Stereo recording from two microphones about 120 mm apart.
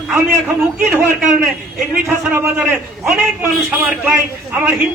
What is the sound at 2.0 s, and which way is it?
Speech, 20° right (ahead or behind).